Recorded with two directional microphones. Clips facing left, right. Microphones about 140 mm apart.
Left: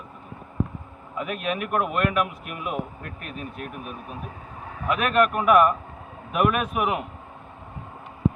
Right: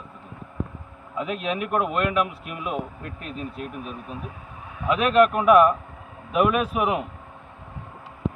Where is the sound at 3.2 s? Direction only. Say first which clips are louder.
Right 3 dB; 30° right (ahead or behind).